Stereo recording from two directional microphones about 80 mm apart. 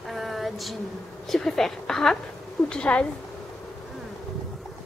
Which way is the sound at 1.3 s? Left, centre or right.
Centre.